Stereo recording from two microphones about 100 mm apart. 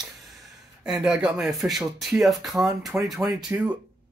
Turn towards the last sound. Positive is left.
turn(degrees=-30)  # may be behind; listen again after turning